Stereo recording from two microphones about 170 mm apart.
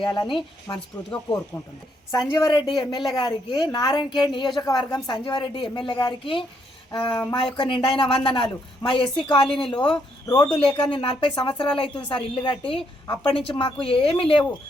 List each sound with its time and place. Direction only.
0.0 s a woman's voice: 25° left (ahead or behind)
2.0 s a woman's voice: 20° left (ahead or behind)